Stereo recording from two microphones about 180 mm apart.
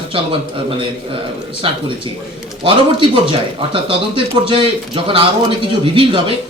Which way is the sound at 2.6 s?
30° right (ahead or behind).